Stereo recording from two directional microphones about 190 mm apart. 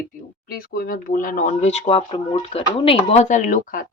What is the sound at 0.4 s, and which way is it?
Speech, 50° left (ahead or behind).